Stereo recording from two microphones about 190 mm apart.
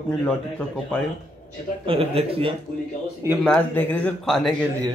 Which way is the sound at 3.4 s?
5° left (ahead or behind).